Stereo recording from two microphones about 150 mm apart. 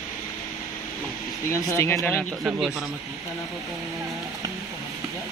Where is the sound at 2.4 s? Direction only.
Centre (ahead or behind).